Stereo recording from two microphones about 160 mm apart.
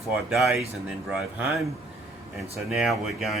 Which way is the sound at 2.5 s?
Centre (ahead or behind).